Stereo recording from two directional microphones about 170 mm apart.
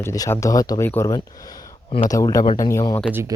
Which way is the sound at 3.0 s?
15° right (ahead or behind).